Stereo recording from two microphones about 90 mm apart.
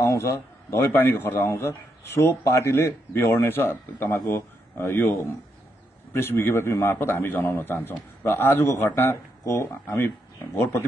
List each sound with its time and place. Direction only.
0.0 s a man's voice: 35° left (ahead or behind)